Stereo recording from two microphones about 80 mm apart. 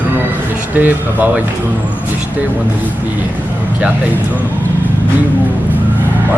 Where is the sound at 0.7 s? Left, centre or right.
Right.